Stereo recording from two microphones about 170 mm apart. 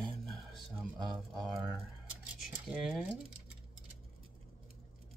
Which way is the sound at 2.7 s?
5° right (ahead or behind).